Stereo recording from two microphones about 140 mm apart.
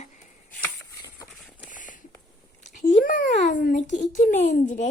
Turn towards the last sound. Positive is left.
turn(degrees=60)  # may be behind; listen again after turning